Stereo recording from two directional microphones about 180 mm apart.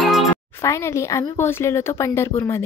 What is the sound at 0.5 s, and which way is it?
Speech, 15° left (ahead or behind).